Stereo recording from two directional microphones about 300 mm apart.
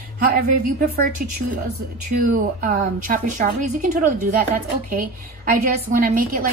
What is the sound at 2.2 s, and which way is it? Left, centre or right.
A woman's voice, right.